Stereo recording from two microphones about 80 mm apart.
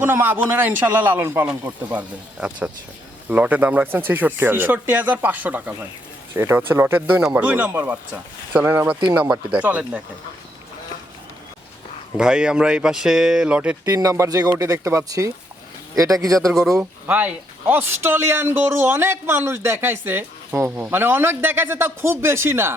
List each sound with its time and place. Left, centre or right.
0.0 s a man's voice: right
1.6 s a man's voice: centre
6.3 s speech: right
7.2 s a man's voice: centre
9.3 s speech: centre
12.1 s speech: centre
13.6 s a man's voice: centre
13.9 s speech: right
16.6 s speech: centre
17.1 s a man's voice: right